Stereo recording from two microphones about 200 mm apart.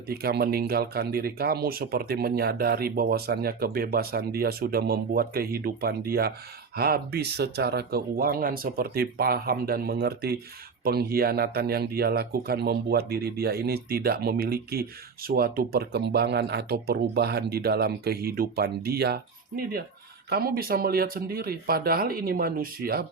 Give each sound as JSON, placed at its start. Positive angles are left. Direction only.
{"t": 0.1, "sound": "speech", "side_deg": -50}